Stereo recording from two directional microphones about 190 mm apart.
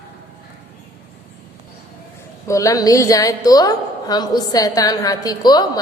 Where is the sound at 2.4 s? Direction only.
15° left (ahead or behind).